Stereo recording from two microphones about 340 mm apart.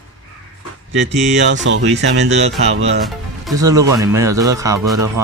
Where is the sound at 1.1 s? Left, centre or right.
Centre.